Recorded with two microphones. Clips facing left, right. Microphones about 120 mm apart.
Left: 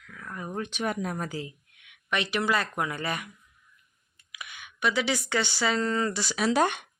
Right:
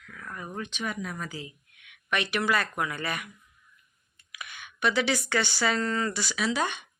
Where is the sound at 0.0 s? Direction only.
10° left (ahead or behind).